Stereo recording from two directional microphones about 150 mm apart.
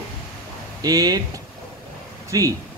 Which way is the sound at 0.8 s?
25° right (ahead or behind).